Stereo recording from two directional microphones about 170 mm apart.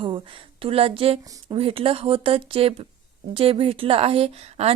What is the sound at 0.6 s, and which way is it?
A woman's voice, 35° right (ahead or behind).